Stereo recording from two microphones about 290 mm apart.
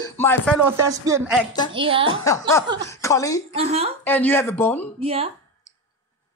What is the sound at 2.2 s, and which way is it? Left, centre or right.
Speech, centre.